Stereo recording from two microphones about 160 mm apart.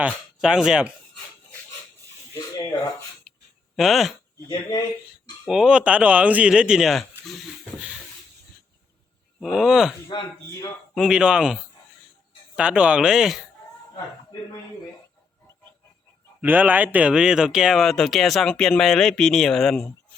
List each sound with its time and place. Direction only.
0.0 s speech: 5° right (ahead or behind)
2.3 s speech: 15° left (ahead or behind)
3.8 s speech: centre (ahead or behind)
5.5 s speech: 5° right (ahead or behind)
9.4 s speech: centre (ahead or behind)
10.1 s speech: 30° left (ahead or behind)
10.9 s speech: 5° right (ahead or behind)
16.4 s speech: 10° right (ahead or behind)